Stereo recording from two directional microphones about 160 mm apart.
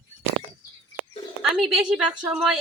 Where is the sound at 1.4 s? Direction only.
Centre (ahead or behind).